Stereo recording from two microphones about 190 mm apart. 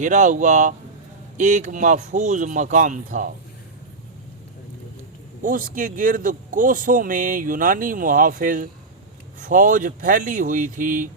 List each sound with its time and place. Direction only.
0.0 s speech: 40° right (ahead or behind)
5.4 s a man's voice: 45° right (ahead or behind)